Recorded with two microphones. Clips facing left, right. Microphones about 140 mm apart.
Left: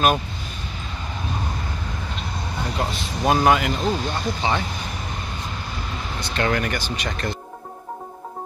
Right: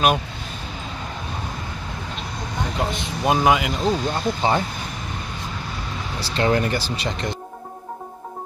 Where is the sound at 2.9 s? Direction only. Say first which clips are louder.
Left 1 dB; 15° right (ahead or behind).